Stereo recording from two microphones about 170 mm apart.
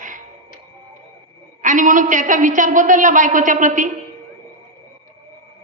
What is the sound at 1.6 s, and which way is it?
A woman's voice, 50° right (ahead or behind).